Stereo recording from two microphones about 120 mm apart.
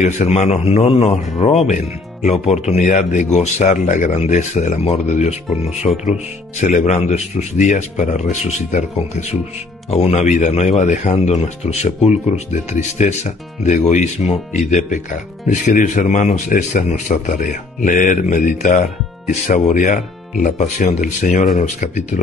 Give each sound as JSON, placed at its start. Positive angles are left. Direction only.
{"t": 0.0, "sound": "a man's voice", "side_deg": 75}
{"t": 6.6, "sound": "speech", "side_deg": 85}
{"t": 9.8, "sound": "speech", "side_deg": 60}
{"t": 12.9, "sound": "a man's voice", "side_deg": 75}